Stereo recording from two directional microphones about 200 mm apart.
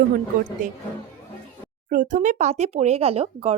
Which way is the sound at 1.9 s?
40° right (ahead or behind).